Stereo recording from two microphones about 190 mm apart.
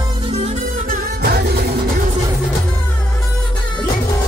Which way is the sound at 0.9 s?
55° right (ahead or behind).